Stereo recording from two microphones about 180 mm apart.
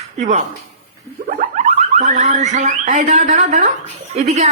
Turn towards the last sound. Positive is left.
turn(degrees=-40)  # may be behind; listen again after turning